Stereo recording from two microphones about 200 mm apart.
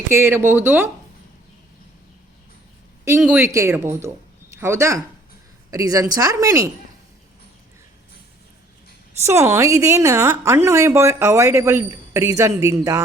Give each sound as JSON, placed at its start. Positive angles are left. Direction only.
{"t": 0.1, "sound": "a woman's voice", "side_deg": -10}
{"t": 3.2, "sound": "a woman's voice", "side_deg": -5}
{"t": 9.2, "sound": "a woman's voice", "side_deg": -15}